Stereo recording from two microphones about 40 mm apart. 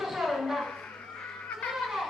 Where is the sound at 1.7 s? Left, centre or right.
Centre.